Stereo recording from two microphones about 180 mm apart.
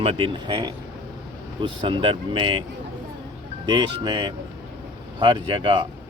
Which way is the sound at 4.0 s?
25° right (ahead or behind).